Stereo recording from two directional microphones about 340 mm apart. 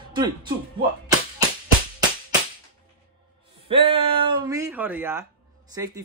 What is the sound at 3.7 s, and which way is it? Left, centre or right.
Speech, centre.